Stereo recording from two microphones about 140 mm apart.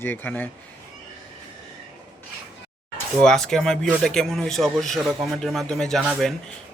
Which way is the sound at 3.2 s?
5° left (ahead or behind).